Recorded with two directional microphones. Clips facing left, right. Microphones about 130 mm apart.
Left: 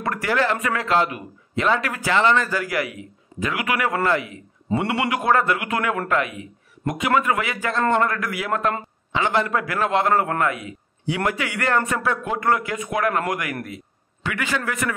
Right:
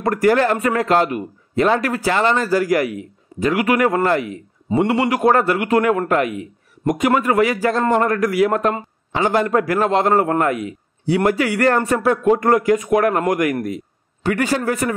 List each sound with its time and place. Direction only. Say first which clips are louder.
0.0 s a man's voice: right 7 dB; 40° right (ahead or behind)